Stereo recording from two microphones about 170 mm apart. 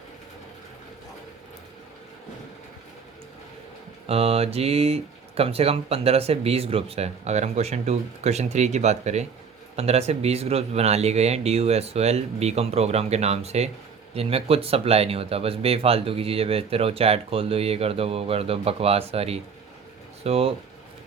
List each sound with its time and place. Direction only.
4.1 s speech: 35° right (ahead or behind)